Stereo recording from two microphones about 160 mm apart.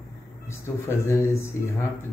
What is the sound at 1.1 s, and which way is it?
Speech, 15° left (ahead or behind).